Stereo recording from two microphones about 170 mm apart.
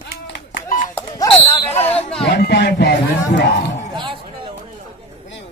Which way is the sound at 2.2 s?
70° left (ahead or behind).